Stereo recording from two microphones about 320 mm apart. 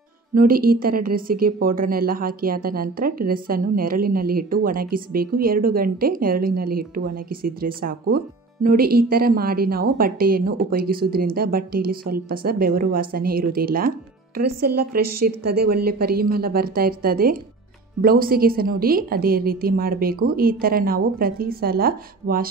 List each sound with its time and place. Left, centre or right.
0.3 s a woman's voice: right